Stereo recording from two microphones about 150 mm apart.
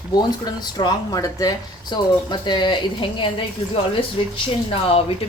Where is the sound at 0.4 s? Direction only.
25° left (ahead or behind).